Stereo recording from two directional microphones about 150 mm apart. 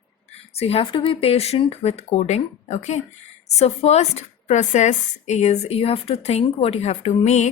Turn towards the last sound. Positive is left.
turn(degrees=50)  # may be behind; listen again after turning